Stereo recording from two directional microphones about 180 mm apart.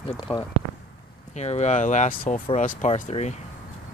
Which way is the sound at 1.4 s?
40° left (ahead or behind).